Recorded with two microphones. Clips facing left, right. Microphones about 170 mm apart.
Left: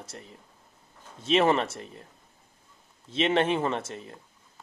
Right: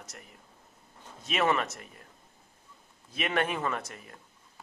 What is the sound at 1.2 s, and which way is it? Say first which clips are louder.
Speech: left 5 dB; 30° left (ahead or behind).